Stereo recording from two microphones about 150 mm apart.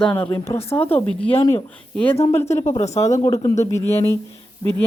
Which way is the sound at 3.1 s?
25° left (ahead or behind).